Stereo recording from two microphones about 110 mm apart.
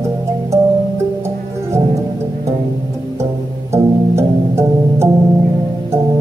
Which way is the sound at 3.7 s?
25° right (ahead or behind).